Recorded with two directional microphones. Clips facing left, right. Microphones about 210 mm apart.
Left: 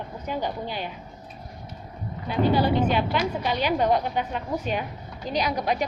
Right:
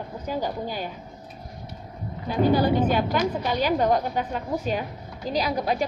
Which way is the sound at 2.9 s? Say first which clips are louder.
Right 1 dB; 45° right (ahead or behind).